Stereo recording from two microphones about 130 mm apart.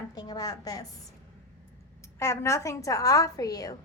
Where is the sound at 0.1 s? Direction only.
30° left (ahead or behind).